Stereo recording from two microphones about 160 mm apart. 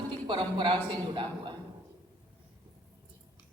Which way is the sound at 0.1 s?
30° right (ahead or behind).